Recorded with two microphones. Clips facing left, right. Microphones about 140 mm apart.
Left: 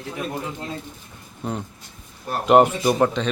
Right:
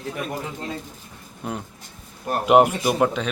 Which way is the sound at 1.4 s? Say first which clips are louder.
Left 2 dB; 5° right (ahead or behind).